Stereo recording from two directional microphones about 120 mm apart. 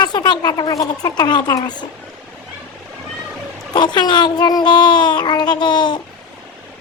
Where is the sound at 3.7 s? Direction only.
35° left (ahead or behind).